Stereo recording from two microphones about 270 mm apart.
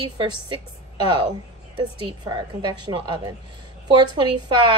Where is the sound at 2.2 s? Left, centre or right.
Centre.